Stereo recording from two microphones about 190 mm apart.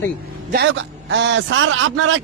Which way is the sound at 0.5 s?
70° right (ahead or behind).